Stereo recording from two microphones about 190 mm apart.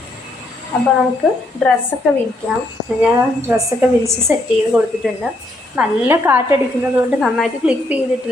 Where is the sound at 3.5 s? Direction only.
15° right (ahead or behind).